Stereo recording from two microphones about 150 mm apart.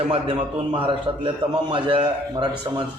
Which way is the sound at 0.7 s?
35° right (ahead or behind).